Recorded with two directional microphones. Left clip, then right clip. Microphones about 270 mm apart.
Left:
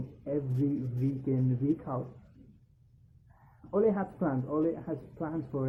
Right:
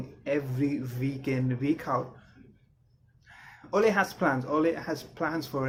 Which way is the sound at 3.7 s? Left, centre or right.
Centre.